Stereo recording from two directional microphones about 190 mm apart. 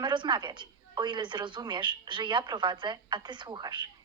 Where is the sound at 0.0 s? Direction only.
25° right (ahead or behind).